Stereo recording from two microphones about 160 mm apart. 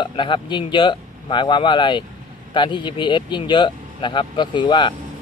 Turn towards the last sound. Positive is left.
turn(degrees=30)  # may be behind; listen again after turning